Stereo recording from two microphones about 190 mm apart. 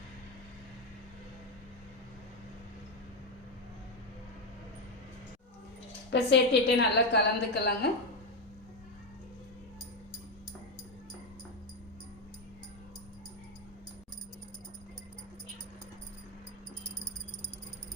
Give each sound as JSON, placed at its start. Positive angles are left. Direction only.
{"t": 6.1, "sound": "a woman's voice", "side_deg": 65}